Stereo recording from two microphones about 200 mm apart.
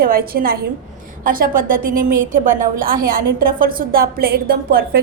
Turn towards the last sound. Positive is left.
turn(degrees=-50)  # may be behind; listen again after turning